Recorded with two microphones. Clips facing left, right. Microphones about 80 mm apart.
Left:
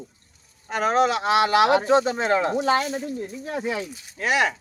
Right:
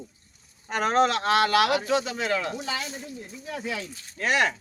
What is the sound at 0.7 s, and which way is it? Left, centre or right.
Speech, centre.